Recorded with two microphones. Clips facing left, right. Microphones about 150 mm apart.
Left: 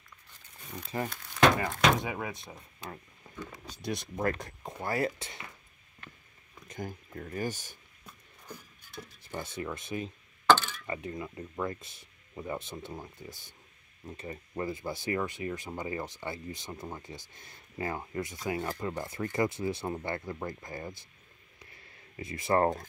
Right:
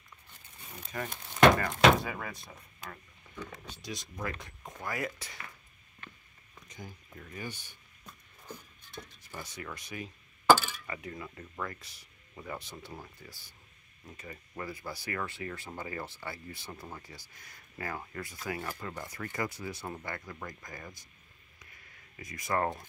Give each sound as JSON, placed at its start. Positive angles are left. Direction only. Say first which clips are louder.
{"t": 1.1, "sound": "a sound", "louder": "right 1 dB", "side_deg": -20}
{"t": 1.6, "sound": "speech", "louder": "right 3 dB", "side_deg": 15}
{"t": 3.3, "sound": "a sound", "louder": "even", "side_deg": 40}
{"t": 3.8, "sound": "speech", "louder": "left 8 dB", "side_deg": 55}
{"t": 6.7, "sound": "speech", "louder": "left 8 dB", "side_deg": 50}
{"t": 9.3, "sound": "speech", "louder": "left 6 dB", "side_deg": 25}
{"t": 10.4, "sound": "coin", "louder": "right 1 dB", "side_deg": -5}
{"t": 10.9, "sound": "speech", "louder": "left 4 dB", "side_deg": 25}
{"t": 21.5, "sound": "a sound", "louder": "left 4 dB", "side_deg": 30}